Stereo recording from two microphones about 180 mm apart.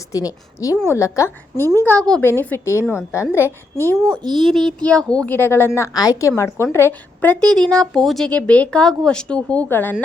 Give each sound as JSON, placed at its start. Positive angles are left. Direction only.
{"t": 0.1, "sound": "a woman's voice", "side_deg": 20}
{"t": 4.3, "sound": "a child's voice", "side_deg": 0}